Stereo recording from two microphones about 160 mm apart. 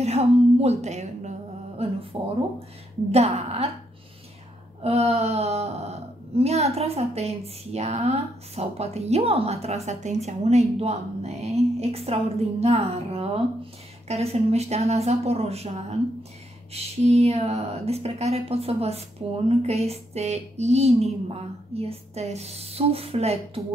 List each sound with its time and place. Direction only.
0.0 s a woman's voice: 40° right (ahead or behind)
3.1 s speech: 40° right (ahead or behind)
4.8 s speech: 40° right (ahead or behind)